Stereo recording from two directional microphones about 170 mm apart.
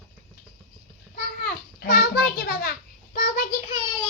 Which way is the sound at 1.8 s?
65° left (ahead or behind).